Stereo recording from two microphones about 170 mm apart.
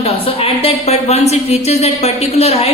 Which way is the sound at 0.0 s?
35° left (ahead or behind).